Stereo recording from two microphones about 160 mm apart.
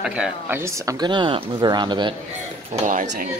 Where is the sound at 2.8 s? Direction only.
55° right (ahead or behind).